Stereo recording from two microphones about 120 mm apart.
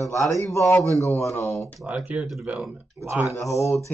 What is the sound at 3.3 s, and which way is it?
Speech, 25° left (ahead or behind).